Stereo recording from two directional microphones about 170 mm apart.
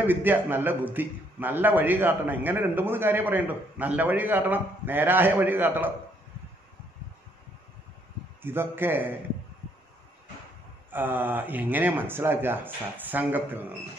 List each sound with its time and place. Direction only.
0.0 s a man's voice: 10° right (ahead or behind)
8.4 s a man's voice: 10° right (ahead or behind)
10.9 s a man's voice: 10° right (ahead or behind)